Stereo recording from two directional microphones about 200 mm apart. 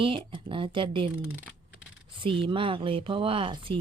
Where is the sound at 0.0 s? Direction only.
25° right (ahead or behind).